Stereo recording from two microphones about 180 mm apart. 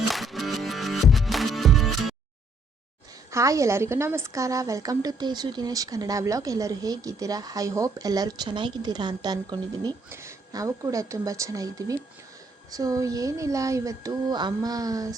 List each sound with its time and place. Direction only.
0.1 s music: centre (ahead or behind)
3.3 s a woman's voice: 15° right (ahead or behind)